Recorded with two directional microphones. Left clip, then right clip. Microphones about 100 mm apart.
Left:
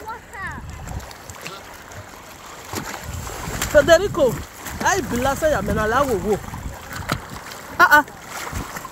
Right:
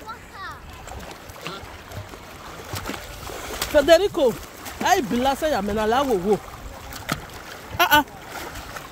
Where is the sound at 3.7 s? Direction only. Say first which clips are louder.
Left 2 dB; 25° right (ahead or behind).